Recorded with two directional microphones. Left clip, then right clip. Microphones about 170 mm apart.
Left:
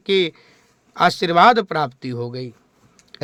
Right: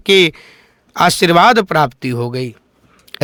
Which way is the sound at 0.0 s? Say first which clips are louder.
Right 8 dB; 40° right (ahead or behind).